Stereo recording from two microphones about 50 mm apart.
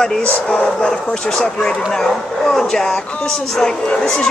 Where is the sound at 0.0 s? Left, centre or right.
Centre.